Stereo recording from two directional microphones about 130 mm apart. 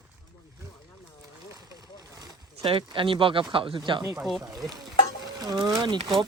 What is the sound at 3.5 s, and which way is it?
Speech, 40° right (ahead or behind).